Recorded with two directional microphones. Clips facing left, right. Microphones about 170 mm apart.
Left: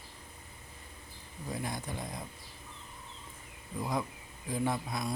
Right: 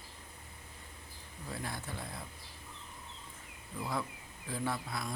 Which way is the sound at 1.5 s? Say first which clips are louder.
Left 4 dB; 15° left (ahead or behind).